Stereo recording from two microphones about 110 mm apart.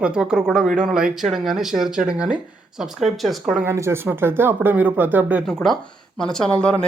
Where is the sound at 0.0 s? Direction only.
10° right (ahead or behind).